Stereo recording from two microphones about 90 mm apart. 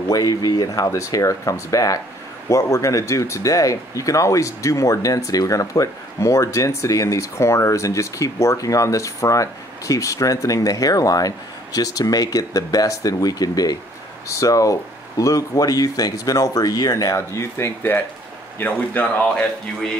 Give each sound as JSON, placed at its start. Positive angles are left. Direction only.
{"t": 0.1, "sound": "speech", "side_deg": 45}